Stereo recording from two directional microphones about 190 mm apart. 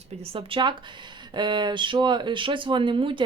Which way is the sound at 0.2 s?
30° right (ahead or behind).